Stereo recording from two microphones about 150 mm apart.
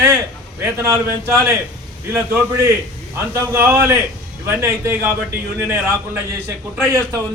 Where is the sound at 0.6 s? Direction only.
15° right (ahead or behind).